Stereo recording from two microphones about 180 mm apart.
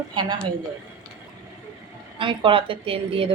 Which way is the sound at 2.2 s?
30° right (ahead or behind).